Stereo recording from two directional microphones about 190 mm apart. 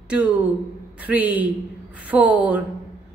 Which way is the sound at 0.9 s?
10° right (ahead or behind).